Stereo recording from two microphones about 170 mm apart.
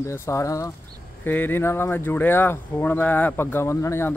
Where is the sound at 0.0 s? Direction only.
15° left (ahead or behind).